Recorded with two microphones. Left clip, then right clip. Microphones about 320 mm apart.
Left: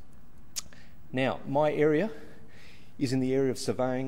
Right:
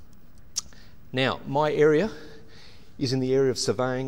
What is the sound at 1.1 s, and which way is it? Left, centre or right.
Speech, right.